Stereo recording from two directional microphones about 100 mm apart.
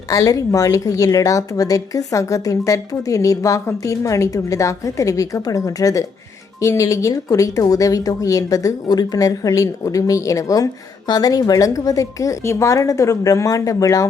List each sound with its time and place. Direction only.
0.1 s speech: 35° left (ahead or behind)